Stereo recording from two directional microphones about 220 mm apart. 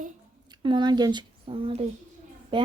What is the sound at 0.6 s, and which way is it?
Speech, 20° right (ahead or behind).